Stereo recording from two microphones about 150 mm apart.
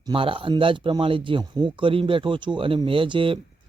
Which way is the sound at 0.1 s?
35° right (ahead or behind).